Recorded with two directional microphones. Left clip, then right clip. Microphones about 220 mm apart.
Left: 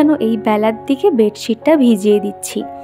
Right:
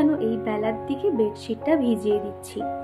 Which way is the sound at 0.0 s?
45° left (ahead or behind).